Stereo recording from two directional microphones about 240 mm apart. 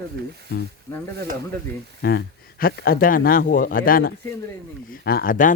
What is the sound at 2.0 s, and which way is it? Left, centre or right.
Speech, left.